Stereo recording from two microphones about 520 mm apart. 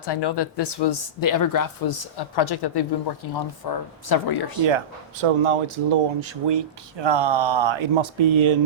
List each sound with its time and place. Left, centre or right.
0.0 s speech: left
5.2 s speech: right